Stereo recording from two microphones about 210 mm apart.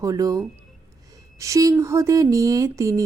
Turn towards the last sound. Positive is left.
turn(degrees=-15)  # may be behind; listen again after turning